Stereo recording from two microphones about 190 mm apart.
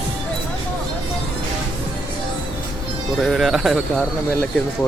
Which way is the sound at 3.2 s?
Centre (ahead or behind).